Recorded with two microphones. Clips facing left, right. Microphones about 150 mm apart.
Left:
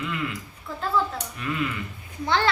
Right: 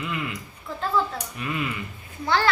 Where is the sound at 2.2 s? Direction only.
20° left (ahead or behind).